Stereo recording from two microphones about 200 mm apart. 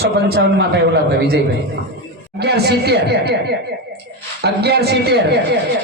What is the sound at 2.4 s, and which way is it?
A man's voice, 55° right (ahead or behind).